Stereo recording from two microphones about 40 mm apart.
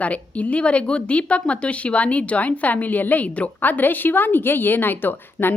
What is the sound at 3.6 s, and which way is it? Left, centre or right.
A woman's voice, left.